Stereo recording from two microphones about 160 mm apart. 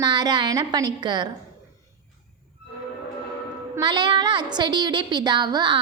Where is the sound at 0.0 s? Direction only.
25° right (ahead or behind).